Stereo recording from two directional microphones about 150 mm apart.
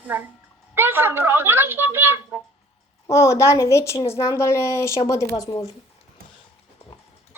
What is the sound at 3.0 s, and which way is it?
A woman's voice, 20° left (ahead or behind).